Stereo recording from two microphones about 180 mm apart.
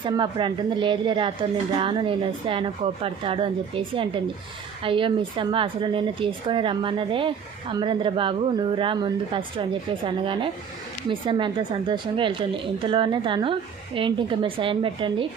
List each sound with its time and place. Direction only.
0.0 s speech: 25° right (ahead or behind)